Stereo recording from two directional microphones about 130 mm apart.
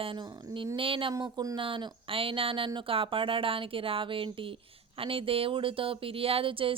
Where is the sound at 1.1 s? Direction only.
30° right (ahead or behind).